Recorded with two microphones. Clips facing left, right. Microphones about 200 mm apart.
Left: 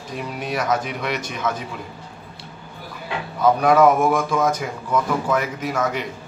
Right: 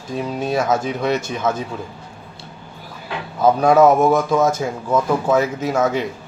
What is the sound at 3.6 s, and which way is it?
Speech, 25° right (ahead or behind).